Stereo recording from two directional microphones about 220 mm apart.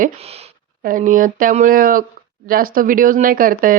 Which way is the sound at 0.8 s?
40° right (ahead or behind).